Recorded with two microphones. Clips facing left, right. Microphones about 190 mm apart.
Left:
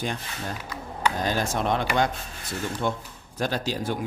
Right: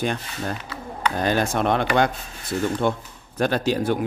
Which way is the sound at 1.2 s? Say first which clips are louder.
Right 8 dB; 60° right (ahead or behind).